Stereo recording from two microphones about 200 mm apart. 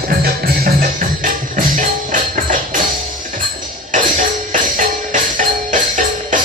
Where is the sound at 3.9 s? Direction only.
40° right (ahead or behind).